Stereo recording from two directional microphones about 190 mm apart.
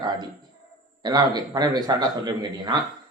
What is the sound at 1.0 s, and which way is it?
A man's voice, 20° right (ahead or behind).